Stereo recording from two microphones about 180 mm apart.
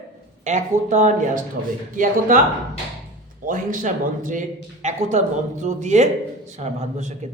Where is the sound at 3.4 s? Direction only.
45° right (ahead or behind).